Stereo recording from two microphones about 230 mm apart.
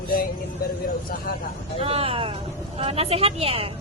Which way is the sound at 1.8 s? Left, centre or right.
Right.